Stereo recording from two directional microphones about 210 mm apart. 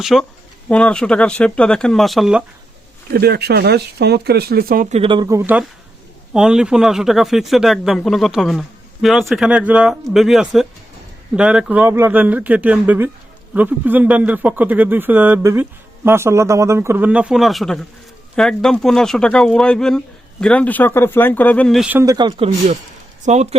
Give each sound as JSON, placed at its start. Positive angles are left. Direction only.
{"t": 0.0, "sound": "speech", "side_deg": 0}
{"t": 3.1, "sound": "speech", "side_deg": -50}
{"t": 5.4, "sound": "speech", "side_deg": -5}
{"t": 22.3, "sound": "speech", "side_deg": -30}